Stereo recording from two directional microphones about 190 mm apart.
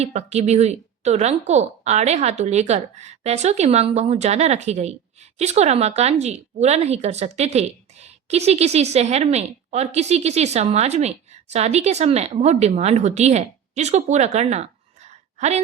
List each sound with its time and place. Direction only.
0.0 s speech: 35° right (ahead or behind)